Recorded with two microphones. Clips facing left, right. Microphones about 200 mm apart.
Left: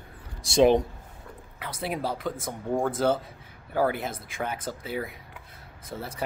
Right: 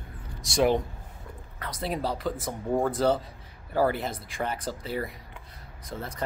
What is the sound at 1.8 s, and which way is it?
Speech, centre (ahead or behind).